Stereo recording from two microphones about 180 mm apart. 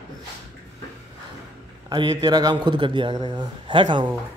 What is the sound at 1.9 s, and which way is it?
A man's voice, 25° right (ahead or behind).